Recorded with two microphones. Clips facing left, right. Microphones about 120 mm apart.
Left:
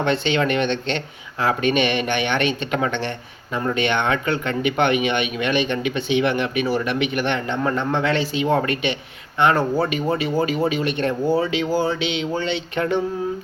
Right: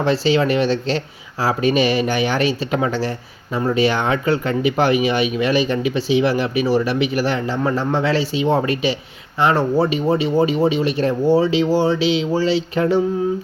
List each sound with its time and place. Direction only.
0.0 s speech: 35° right (ahead or behind)